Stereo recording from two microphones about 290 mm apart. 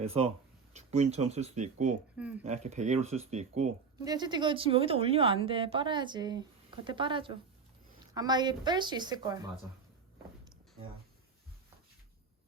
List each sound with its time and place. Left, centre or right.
0.0 s speech: right
2.1 s speech: centre
2.4 s speech: right